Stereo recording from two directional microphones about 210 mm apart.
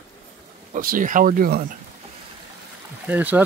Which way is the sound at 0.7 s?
40° right (ahead or behind).